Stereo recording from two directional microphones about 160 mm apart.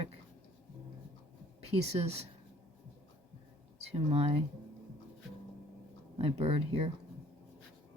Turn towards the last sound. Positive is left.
turn(degrees=-40)  # may be behind; listen again after turning